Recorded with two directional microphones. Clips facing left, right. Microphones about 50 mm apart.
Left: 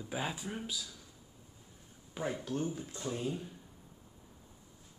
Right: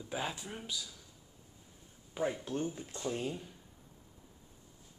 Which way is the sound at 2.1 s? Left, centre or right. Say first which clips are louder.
Right 2 dB; centre.